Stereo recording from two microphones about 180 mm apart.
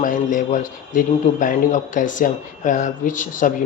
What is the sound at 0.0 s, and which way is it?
A man's voice, 45° left (ahead or behind).